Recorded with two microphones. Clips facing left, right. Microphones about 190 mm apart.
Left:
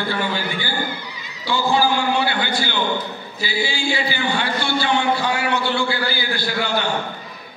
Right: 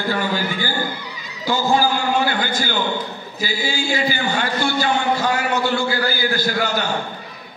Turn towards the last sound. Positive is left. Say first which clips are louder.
# right 1 dB
turn(degrees=-45)  # may be behind; listen again after turning